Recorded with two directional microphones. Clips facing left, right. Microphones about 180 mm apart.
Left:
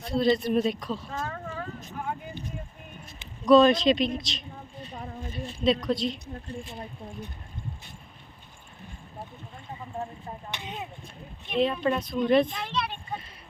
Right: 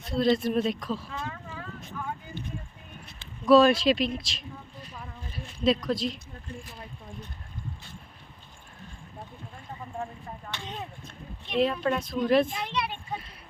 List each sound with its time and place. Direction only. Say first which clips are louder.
0.0 s speech: even; centre (ahead or behind)
1.1 s a sound: left 3 dB; 45° left (ahead or behind)
3.4 s speech: left 1 dB; 5° right (ahead or behind)
4.9 s a sound: left 6 dB; 40° left (ahead or behind)
5.3 s a woman's voice: even; centre (ahead or behind)
10.5 s speech: even; 15° left (ahead or behind)
11.4 s speech: even; centre (ahead or behind)